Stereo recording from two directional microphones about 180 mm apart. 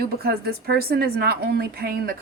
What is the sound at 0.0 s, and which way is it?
Speech, 60° right (ahead or behind).